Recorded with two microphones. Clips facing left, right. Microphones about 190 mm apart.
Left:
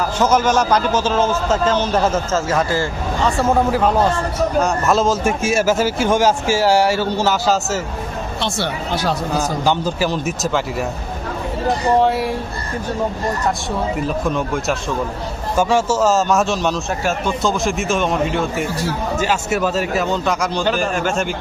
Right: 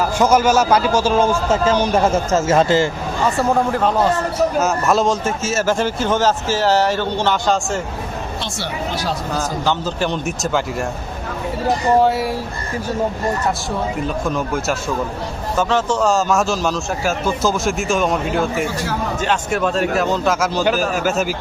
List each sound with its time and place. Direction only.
0.2 s speech: 10° right (ahead or behind)
2.3 s speech: 25° right (ahead or behind)
3.2 s a man's voice: centre (ahead or behind)
5.2 s a man's voice: 10° left (ahead or behind)
8.4 s speech: 60° left (ahead or behind)
9.6 s a man's voice: 10° left (ahead or behind)
11.9 s a man's voice: centre (ahead or behind)
14.3 s a man's voice: centre (ahead or behind)